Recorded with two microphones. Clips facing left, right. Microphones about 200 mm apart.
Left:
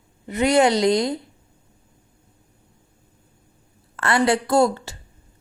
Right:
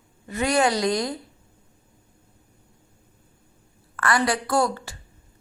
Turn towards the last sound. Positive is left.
turn(degrees=25)  # may be behind; listen again after turning